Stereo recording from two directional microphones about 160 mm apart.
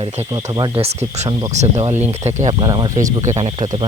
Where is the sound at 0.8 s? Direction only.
40° right (ahead or behind).